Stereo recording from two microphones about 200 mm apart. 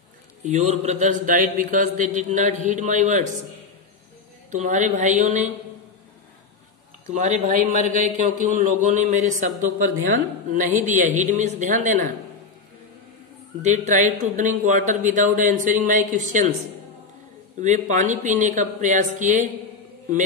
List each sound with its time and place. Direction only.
0.4 s a man's voice: 35° right (ahead or behind)
4.5 s a man's voice: 40° right (ahead or behind)
7.2 s a man's voice: 40° right (ahead or behind)
13.6 s a man's voice: 35° right (ahead or behind)
17.6 s a man's voice: 40° right (ahead or behind)